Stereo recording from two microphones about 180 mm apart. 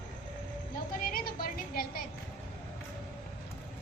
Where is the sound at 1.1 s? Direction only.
55° left (ahead or behind).